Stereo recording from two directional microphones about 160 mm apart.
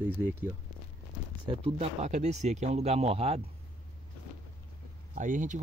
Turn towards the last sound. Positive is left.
turn(degrees=-50)  # may be behind; listen again after turning